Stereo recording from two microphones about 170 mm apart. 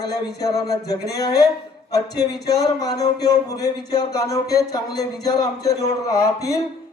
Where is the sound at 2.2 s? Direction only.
20° left (ahead or behind).